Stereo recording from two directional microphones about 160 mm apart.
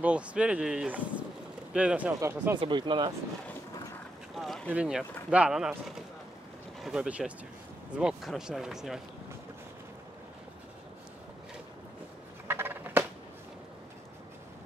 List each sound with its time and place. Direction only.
0.0 s speech: 5° right (ahead or behind)
2.6 s speech: 30° right (ahead or behind)
4.4 s boat: centre (ahead or behind)
4.6 s speech: 5° right (ahead or behind)
12.4 s a sound: 15° right (ahead or behind)